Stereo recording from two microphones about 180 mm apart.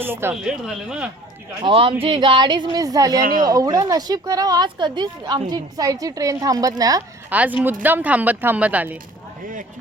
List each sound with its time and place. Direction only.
0.0 s speech: 10° right (ahead or behind)
1.6 s speech: 30° right (ahead or behind)
7.3 s speech: 10° right (ahead or behind)